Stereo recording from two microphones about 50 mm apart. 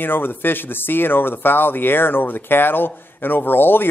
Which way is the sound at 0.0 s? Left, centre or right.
Left.